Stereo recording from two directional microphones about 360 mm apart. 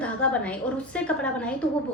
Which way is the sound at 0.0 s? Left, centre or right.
Centre.